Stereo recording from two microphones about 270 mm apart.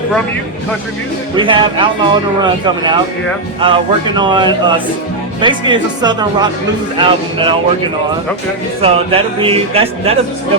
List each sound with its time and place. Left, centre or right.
1.4 s speech: centre
8.8 s speech: right